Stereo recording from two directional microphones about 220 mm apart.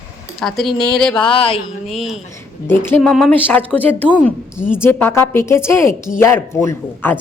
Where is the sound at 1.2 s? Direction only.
25° left (ahead or behind).